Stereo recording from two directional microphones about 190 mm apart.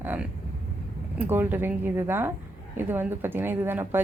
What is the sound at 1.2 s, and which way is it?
A woman's voice, 10° right (ahead or behind).